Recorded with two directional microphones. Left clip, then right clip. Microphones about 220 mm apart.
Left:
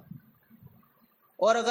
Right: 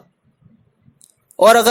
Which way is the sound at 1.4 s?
45° right (ahead or behind).